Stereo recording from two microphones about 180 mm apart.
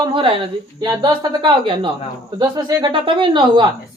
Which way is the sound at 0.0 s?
30° right (ahead or behind).